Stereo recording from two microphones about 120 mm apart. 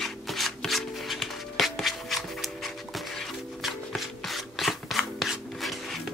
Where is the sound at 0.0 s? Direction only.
Centre (ahead or behind).